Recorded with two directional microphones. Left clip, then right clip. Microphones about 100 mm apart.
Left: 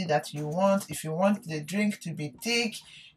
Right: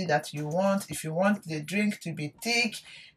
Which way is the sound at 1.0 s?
20° right (ahead or behind).